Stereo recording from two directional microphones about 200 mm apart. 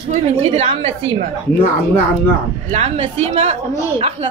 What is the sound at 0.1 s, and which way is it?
Speech, 30° right (ahead or behind).